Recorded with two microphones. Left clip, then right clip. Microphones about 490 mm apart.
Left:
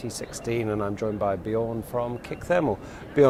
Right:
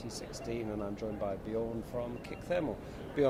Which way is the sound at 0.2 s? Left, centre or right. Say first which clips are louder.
Left 10 dB; left.